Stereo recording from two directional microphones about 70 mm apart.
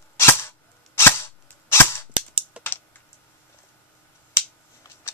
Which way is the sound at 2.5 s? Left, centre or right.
Centre.